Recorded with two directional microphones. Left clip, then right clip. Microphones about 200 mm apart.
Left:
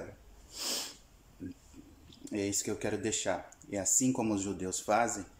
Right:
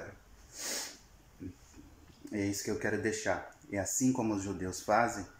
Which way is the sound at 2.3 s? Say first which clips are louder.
Left 1 dB; 15° left (ahead or behind).